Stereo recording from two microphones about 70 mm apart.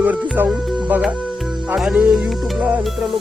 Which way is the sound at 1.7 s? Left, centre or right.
Centre.